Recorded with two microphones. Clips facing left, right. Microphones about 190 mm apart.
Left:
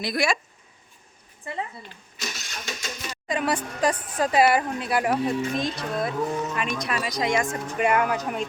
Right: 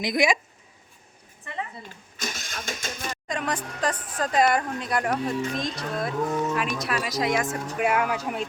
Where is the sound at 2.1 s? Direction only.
50° right (ahead or behind).